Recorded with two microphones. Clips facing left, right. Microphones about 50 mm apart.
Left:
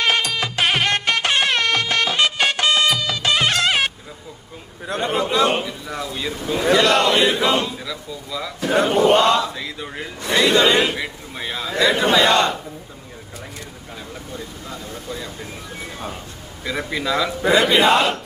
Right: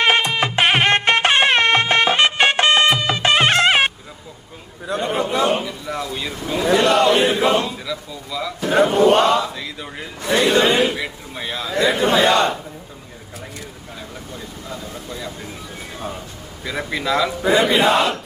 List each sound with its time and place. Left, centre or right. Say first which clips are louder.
0.0 s music: right 3 dB; right
4.9 s a sound: even; left
5.6 s a sound: right 2 dB; centre
6.7 s chant: right 1 dB; left
7.9 s speech: right 2 dB; centre
8.8 s chant: right 2 dB; left
9.6 s a man's voice: left 1 dB; centre
10.4 s a man's voice: even; left
10.9 s a sound: right 1 dB; centre
11.8 s a man's voice: even; left
16.6 s a man's voice: right 1 dB; centre
17.5 s a man's voice: left 1 dB; left